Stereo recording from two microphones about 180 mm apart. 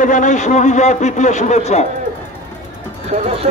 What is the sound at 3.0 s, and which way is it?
Speech, 35° right (ahead or behind).